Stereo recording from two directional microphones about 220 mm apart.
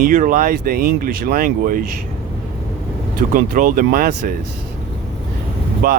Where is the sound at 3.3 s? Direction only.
40° right (ahead or behind).